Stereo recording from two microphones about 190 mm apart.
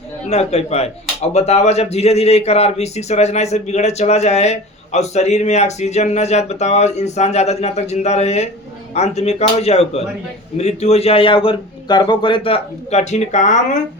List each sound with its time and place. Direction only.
0.3 s a man's voice: 35° left (ahead or behind)